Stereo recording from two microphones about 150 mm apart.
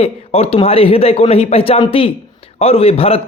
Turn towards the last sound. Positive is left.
turn(degrees=40)  # may be behind; listen again after turning